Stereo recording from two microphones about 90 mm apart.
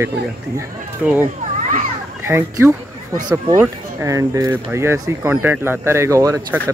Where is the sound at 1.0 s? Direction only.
10° right (ahead or behind).